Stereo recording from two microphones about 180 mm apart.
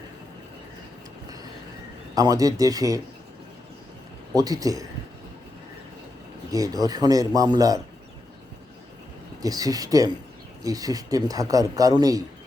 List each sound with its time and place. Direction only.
2.1 s a man's voice: 20° right (ahead or behind)
4.4 s a man's voice: 20° right (ahead or behind)
6.5 s a man's voice: 20° right (ahead or behind)
9.4 s a man's voice: 20° right (ahead or behind)